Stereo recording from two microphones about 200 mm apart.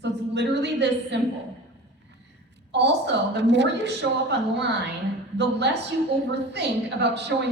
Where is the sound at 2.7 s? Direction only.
60° right (ahead or behind).